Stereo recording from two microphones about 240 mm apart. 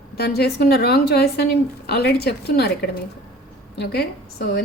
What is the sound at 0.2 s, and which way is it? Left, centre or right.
A woman's voice, left.